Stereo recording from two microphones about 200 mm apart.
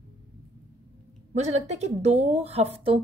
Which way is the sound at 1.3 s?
35° right (ahead or behind).